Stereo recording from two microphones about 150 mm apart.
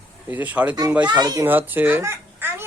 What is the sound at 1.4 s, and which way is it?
A child's voice, 10° right (ahead or behind).